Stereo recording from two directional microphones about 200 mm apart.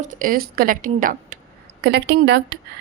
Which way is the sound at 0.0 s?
45° right (ahead or behind).